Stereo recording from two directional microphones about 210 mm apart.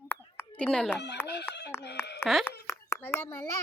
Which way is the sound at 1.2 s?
10° left (ahead or behind).